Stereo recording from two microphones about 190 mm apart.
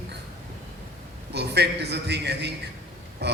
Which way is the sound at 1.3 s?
60° right (ahead or behind).